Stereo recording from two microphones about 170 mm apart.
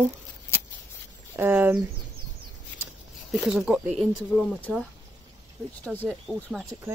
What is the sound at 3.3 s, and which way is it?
Speech, 5° right (ahead or behind).